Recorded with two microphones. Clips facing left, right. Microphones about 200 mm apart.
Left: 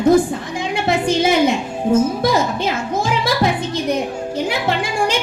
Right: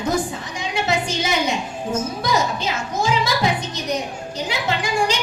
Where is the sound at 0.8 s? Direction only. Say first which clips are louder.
Left 8 dB; 55° left (ahead or behind).